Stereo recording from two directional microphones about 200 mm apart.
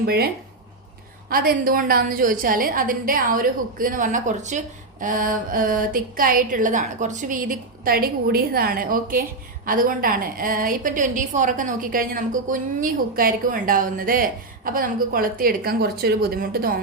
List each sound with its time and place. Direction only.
0.0 s a woman's voice: 50° right (ahead or behind)
1.3 s a woman's voice: 45° right (ahead or behind)